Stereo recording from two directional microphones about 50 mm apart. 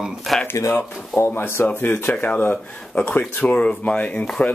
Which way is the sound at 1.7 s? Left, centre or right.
Left.